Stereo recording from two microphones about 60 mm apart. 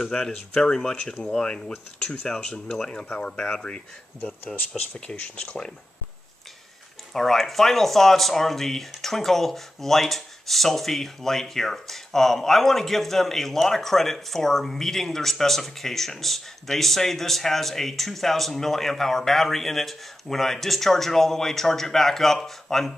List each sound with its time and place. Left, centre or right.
0.0 s speech: centre
7.2 s speech: centre